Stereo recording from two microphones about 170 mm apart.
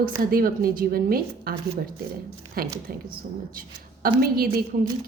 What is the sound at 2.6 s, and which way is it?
Speech, 60° right (ahead or behind).